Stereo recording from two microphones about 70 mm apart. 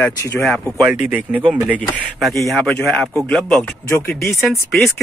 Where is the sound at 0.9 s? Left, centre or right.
Right.